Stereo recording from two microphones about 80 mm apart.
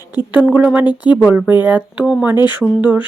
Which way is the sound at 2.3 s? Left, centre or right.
Left.